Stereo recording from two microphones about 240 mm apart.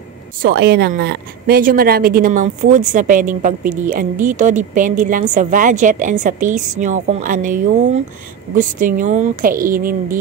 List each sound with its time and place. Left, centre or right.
0.4 s a woman's voice: right